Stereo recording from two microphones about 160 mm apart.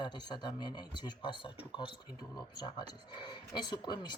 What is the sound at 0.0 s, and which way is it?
Speech, 25° left (ahead or behind).